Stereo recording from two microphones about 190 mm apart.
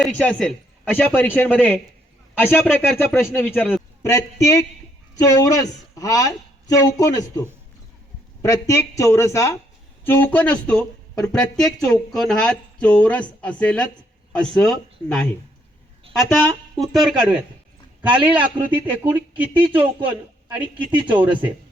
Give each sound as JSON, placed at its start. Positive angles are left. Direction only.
{"t": 0.0, "sound": "a man's voice", "side_deg": 0}
{"t": 3.1, "sound": "speech", "side_deg": 0}
{"t": 3.6, "sound": "a man's voice", "side_deg": 10}
{"t": 16.4, "sound": "a man's voice", "side_deg": 5}
{"t": 20.7, "sound": "speech", "side_deg": -25}